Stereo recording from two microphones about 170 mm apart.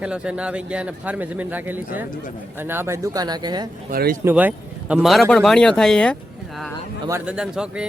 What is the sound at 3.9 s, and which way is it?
Speech, 60° right (ahead or behind).